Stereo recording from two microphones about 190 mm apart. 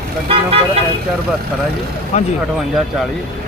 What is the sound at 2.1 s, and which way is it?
Speech, 35° left (ahead or behind).